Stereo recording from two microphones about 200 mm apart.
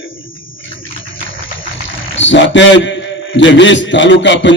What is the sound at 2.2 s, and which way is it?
A man's voice, 65° left (ahead or behind).